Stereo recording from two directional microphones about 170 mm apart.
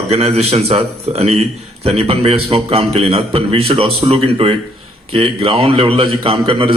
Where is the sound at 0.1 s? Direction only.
40° right (ahead or behind).